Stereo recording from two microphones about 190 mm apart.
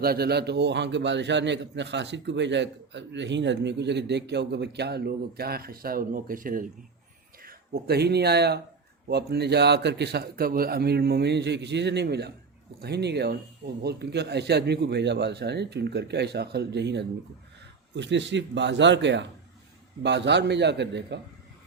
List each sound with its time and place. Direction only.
0.0 s a man's voice: 55° right (ahead or behind)